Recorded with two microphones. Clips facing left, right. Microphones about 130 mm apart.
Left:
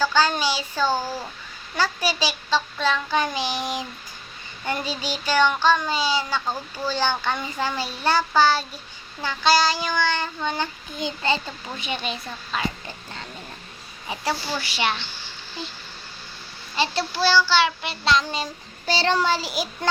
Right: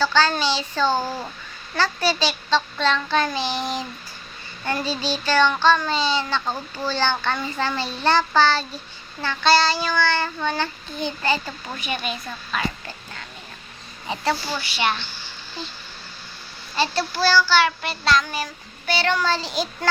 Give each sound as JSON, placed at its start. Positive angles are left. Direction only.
{"t": 0.0, "sound": "a child's voice", "side_deg": 15}
{"t": 0.9, "sound": "a child's voice", "side_deg": -15}
{"t": 1.7, "sound": "a child's voice", "side_deg": 10}
{"t": 14.8, "sound": "child singing", "side_deg": 30}
{"t": 16.7, "sound": "child singing", "side_deg": 20}
{"t": 18.9, "sound": "a child's voice", "side_deg": 30}
{"t": 19.2, "sound": "a child's voice", "side_deg": 10}